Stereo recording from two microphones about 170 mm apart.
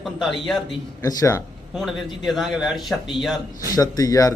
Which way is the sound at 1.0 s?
20° left (ahead or behind).